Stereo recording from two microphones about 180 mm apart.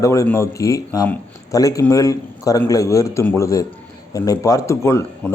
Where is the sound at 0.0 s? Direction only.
15° left (ahead or behind).